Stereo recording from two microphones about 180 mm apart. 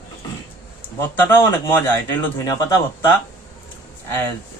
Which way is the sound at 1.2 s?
10° left (ahead or behind).